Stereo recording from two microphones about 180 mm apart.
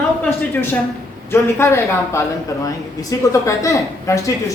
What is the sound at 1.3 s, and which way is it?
Speech, 15° left (ahead or behind).